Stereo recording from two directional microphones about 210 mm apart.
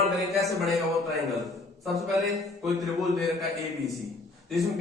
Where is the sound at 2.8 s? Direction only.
Centre (ahead or behind).